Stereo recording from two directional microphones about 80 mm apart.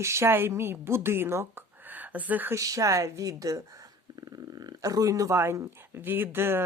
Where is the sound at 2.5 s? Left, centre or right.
Right.